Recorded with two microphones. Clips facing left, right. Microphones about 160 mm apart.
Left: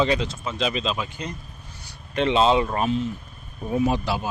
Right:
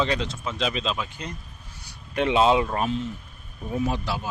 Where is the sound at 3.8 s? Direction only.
15° left (ahead or behind).